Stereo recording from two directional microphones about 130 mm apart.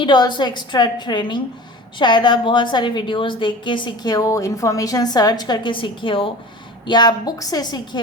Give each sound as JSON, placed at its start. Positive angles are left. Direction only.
{"t": 0.0, "sound": "a woman's voice", "side_deg": 35}